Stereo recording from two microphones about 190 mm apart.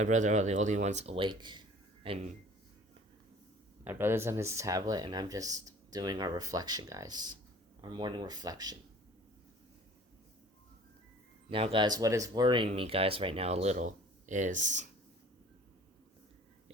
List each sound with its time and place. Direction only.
0.0 s speech: 40° right (ahead or behind); by 1.6 s 25° right (ahead or behind)
3.8 s speech: 10° right (ahead or behind)
11.5 s speech: 25° right (ahead or behind)